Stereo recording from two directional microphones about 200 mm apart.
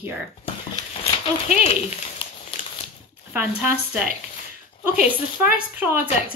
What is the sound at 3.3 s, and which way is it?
Speech, 10° right (ahead or behind).